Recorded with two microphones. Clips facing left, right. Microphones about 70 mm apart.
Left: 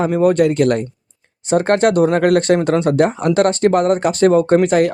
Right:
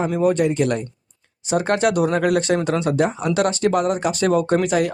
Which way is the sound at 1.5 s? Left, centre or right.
Left.